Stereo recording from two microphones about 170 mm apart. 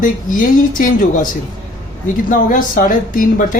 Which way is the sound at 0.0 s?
50° left (ahead or behind).